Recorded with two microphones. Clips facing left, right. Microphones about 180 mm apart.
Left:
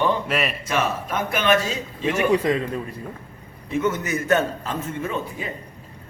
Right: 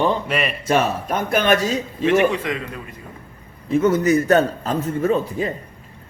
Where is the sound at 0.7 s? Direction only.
40° right (ahead or behind).